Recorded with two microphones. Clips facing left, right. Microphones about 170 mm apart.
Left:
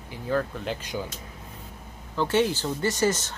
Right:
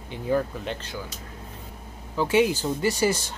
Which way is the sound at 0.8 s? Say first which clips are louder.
Left 3 dB; 15° left (ahead or behind).